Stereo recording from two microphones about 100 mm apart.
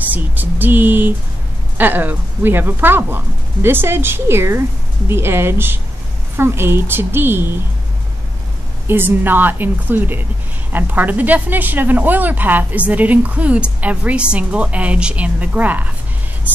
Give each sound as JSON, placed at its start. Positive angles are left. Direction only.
{"t": 0.1, "sound": "speech", "side_deg": -20}
{"t": 8.8, "sound": "speech", "side_deg": -20}